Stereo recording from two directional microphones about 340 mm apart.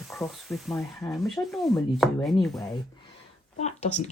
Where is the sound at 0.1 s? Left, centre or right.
Centre.